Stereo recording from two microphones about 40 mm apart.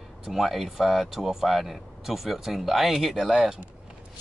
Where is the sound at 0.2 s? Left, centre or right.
Centre.